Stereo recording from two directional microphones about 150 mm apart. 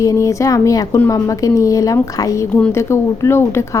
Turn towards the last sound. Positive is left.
turn(degrees=15)  # may be behind; listen again after turning